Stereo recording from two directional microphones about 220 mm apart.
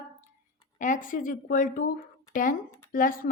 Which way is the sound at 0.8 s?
35° left (ahead or behind).